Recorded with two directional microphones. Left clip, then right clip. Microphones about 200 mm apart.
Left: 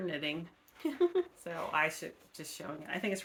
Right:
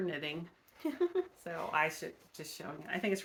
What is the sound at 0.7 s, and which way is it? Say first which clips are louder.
Speech: left 3 dB; 25° left (ahead or behind).